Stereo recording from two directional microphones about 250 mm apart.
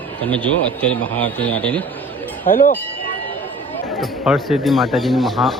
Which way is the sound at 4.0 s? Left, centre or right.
Centre.